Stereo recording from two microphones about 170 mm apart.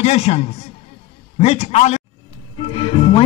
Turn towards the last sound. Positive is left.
turn(degrees=30)  # may be behind; listen again after turning